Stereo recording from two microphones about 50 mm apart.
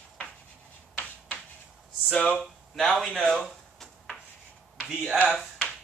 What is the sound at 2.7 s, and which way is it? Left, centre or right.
Speech, centre.